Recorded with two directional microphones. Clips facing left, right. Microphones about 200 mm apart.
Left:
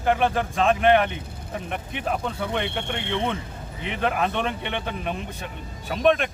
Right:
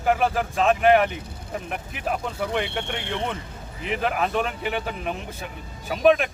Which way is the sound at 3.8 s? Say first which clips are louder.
Even; centre (ahead or behind).